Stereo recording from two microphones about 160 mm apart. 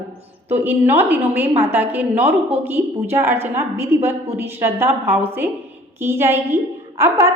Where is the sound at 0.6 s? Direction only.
15° right (ahead or behind).